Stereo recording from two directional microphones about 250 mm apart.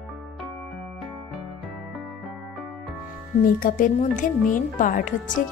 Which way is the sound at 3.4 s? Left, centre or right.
Left.